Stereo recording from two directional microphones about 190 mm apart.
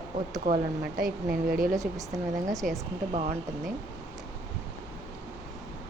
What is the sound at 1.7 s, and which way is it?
Speech, 15° right (ahead or behind).